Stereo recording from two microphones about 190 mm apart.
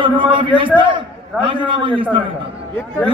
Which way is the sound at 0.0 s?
25° right (ahead or behind).